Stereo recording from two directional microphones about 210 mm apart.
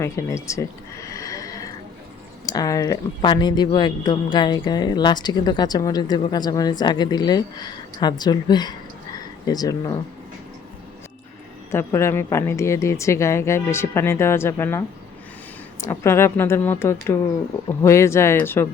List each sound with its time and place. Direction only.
0.0 s a sound: 15° left (ahead or behind)
2.5 s speech: 15° left (ahead or behind)
11.7 s a woman's voice: 10° left (ahead or behind)